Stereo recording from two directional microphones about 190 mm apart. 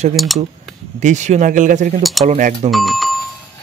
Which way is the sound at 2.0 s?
Centre (ahead or behind).